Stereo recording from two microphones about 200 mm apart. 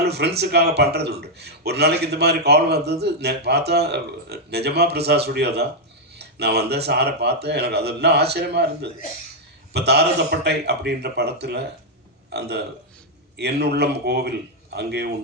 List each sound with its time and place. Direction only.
0.0 s speech: 55° right (ahead or behind)